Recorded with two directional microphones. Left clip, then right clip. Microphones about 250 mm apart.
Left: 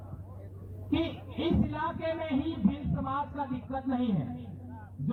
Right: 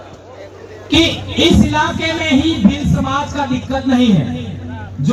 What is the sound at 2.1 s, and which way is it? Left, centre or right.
A man's voice, right.